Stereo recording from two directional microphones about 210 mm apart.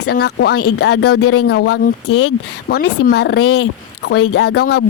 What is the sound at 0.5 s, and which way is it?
Speech, 90° left.